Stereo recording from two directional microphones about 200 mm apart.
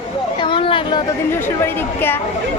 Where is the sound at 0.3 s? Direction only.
25° left (ahead or behind).